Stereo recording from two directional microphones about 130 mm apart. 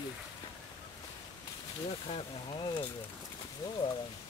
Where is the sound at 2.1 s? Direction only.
35° left (ahead or behind).